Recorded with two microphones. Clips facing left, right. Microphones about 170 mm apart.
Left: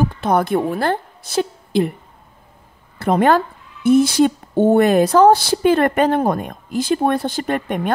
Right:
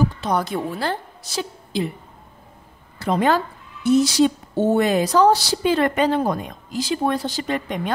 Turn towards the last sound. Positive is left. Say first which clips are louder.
# left 4 dB
turn(degrees=55)  # may be behind; listen again after turning